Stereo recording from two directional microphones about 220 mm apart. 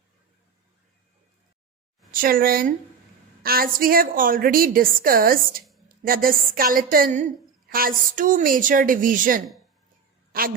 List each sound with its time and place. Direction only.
2.1 s a woman's voice: 40° right (ahead or behind)